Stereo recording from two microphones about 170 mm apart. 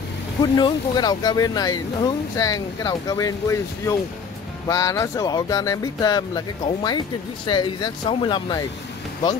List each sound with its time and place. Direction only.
0.4 s speech: 25° left (ahead or behind)